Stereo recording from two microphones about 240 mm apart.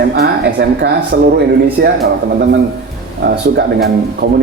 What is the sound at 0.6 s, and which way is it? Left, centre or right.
A man's voice, right.